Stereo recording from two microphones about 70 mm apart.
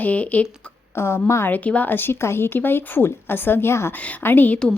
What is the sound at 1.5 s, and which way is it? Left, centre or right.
A woman's voice, left.